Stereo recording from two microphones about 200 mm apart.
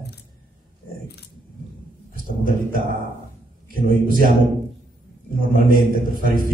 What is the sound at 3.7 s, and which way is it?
Speech, 45° right (ahead or behind).